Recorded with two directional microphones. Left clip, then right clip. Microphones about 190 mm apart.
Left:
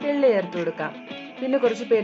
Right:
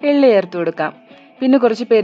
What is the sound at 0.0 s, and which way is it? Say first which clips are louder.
Speech: right 8 dB; 45° right (ahead or behind).